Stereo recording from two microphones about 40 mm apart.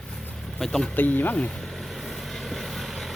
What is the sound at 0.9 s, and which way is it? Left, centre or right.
Speech, left.